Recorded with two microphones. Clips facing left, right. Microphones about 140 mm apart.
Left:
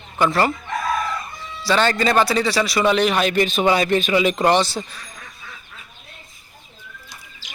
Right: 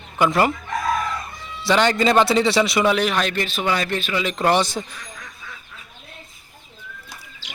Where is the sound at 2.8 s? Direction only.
5° right (ahead or behind); by 4.3 s 15° left (ahead or behind).